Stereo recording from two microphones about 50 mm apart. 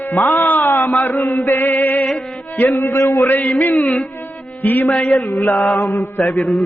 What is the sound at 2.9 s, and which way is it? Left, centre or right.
Speech, left.